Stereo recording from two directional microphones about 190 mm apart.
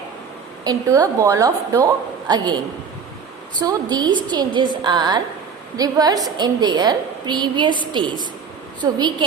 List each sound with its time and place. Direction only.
0.6 s a woman's voice: 20° right (ahead or behind)
3.6 s a woman's voice: 20° right (ahead or behind)